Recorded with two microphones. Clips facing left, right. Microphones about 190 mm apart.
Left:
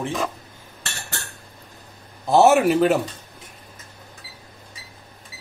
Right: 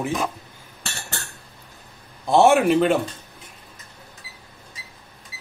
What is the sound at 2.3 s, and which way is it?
Speech, centre (ahead or behind).